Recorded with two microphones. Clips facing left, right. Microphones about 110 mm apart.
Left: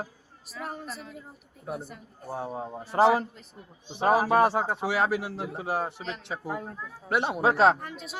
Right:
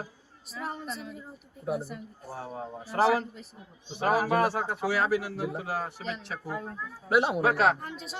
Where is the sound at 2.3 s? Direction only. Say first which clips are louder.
Left 4 dB; 20° left (ahead or behind).